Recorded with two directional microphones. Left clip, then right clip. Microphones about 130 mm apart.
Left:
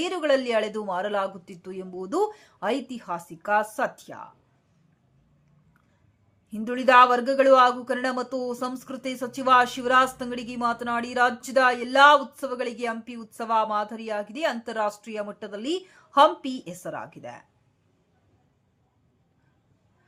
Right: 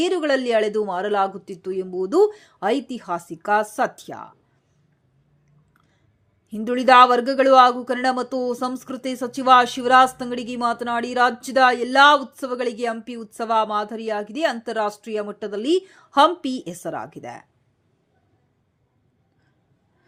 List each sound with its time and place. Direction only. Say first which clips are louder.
0.0 s speech: right 3 dB; 25° right (ahead or behind)
6.5 s speech: right 4 dB; 30° right (ahead or behind)